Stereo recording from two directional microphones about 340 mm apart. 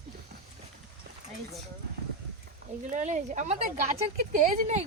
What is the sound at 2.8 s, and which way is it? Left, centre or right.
Speech, right.